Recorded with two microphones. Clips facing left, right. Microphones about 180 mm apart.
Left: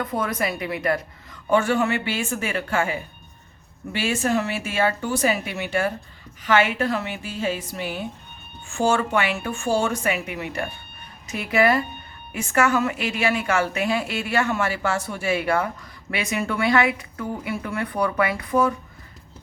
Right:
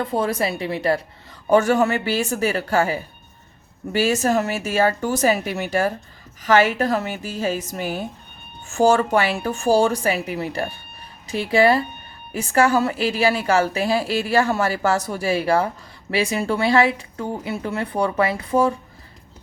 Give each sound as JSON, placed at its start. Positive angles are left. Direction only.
{"t": 0.0, "sound": "a woman's voice", "side_deg": -30}